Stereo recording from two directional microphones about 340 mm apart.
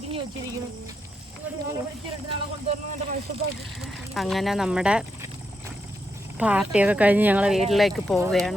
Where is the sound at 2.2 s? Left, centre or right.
Centre.